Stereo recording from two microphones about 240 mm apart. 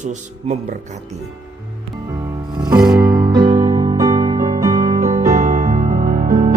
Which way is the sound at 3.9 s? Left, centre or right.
Centre.